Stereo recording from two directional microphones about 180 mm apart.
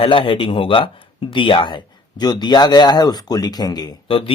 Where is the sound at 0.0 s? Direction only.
30° left (ahead or behind).